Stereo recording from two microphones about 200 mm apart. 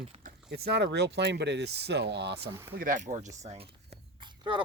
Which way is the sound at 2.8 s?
40° right (ahead or behind).